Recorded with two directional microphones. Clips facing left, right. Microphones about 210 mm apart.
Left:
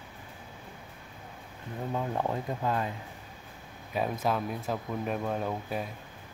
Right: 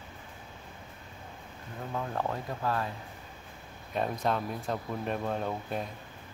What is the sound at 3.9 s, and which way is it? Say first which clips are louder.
Speech: left 1 dB; 5° left (ahead or behind).